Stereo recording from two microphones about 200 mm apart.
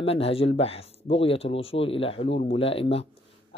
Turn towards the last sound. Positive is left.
turn(degrees=30)  # may be behind; listen again after turning